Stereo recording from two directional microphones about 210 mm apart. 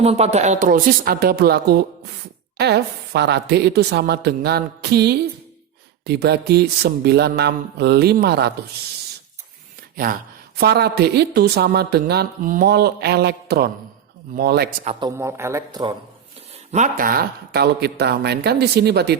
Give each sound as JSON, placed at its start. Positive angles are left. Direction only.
{"t": 0.0, "sound": "speech", "side_deg": -30}
{"t": 9.9, "sound": "speech", "side_deg": -45}
{"t": 15.2, "sound": "speech", "side_deg": -15}
{"t": 16.7, "sound": "speech", "side_deg": -40}